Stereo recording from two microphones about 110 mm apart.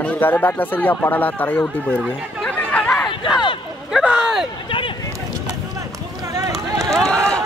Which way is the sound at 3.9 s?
5° right (ahead or behind).